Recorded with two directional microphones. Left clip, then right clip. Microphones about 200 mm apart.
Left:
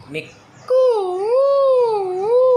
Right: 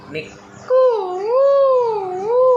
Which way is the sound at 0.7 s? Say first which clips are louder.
Right 1 dB; 40° left (ahead or behind).